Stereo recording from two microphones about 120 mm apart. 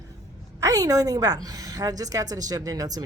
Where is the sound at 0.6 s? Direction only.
30° right (ahead or behind).